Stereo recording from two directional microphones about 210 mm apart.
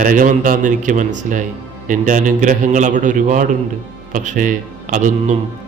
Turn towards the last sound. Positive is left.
turn(degrees=-40)  # may be behind; listen again after turning